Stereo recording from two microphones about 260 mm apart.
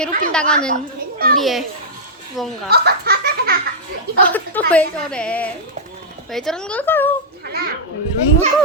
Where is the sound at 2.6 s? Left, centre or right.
Right.